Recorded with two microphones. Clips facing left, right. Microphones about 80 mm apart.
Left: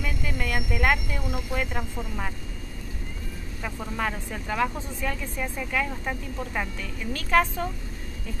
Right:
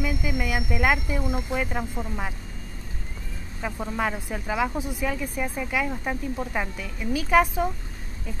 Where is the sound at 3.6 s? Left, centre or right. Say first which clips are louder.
Right 3 dB; centre.